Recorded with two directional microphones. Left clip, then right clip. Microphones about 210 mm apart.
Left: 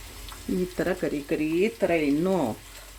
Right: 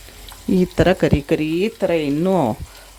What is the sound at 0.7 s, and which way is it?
Speech, 35° right (ahead or behind).